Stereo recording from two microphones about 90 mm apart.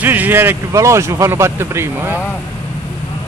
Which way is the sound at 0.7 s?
35° right (ahead or behind).